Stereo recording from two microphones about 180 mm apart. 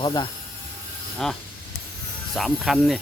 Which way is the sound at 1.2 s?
Centre (ahead or behind).